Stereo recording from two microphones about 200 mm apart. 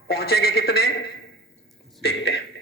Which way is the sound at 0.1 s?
50° left (ahead or behind).